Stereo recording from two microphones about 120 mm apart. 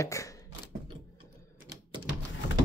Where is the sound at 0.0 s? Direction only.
25° left (ahead or behind).